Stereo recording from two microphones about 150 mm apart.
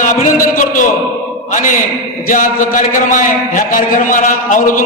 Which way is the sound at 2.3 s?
60° left (ahead or behind).